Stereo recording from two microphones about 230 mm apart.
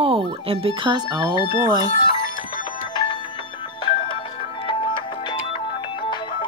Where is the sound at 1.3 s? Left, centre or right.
Left.